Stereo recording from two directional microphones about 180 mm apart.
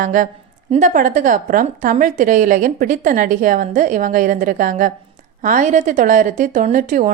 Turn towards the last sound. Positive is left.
turn(degrees=-45)  # may be behind; listen again after turning